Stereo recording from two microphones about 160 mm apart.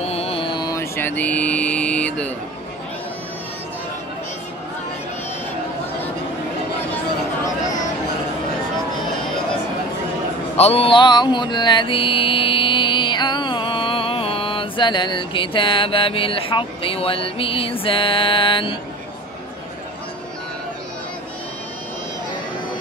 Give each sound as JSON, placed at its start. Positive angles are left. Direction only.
{"t": 0.0, "sound": "mantra", "side_deg": 40}
{"t": 10.5, "sound": "mantra", "side_deg": 40}